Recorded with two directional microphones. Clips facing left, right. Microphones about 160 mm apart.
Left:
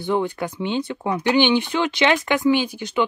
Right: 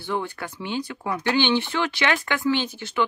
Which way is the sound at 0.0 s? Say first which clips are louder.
Left 6 dB; 20° left (ahead or behind).